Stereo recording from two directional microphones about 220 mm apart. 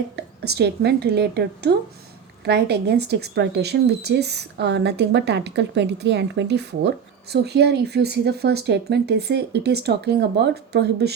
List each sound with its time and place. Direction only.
0.2 s a woman's voice: 50° right (ahead or behind)